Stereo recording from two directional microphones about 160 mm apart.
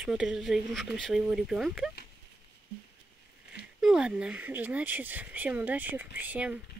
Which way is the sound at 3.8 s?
5° right (ahead or behind).